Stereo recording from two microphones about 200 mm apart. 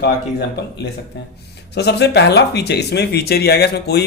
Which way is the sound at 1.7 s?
55° left (ahead or behind).